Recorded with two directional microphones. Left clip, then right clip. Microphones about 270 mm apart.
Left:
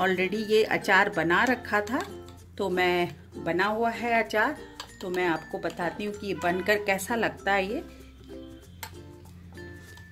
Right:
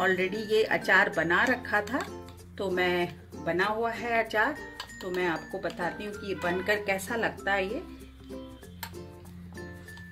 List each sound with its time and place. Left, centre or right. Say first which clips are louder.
0.0 s speech: left 1 dB; left